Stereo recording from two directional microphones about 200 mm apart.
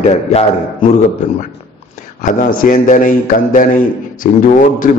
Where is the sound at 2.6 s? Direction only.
45° left (ahead or behind).